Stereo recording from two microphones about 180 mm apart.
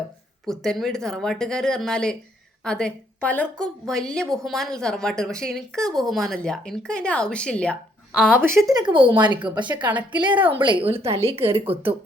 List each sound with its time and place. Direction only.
0.4 s a woman's voice: 5° left (ahead or behind)
8.1 s speech: 5° right (ahead or behind)
8.7 s a woman's voice: 25° right (ahead or behind)
10.8 s speech: 15° right (ahead or behind)
11.4 s speech: 30° right (ahead or behind)